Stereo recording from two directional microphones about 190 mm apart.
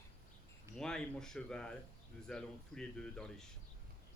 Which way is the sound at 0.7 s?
5° left (ahead or behind).